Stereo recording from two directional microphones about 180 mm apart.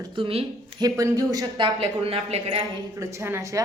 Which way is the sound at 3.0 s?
15° right (ahead or behind).